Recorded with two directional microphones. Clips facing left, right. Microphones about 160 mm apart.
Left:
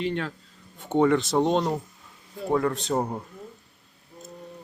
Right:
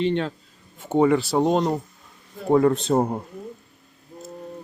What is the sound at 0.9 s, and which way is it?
Speech, 10° right (ahead or behind).